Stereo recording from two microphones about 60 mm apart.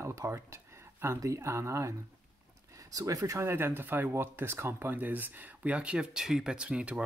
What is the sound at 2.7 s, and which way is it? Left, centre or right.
Speech, right.